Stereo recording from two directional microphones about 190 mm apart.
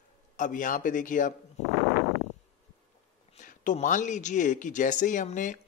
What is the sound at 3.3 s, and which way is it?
Speech, 40° left (ahead or behind).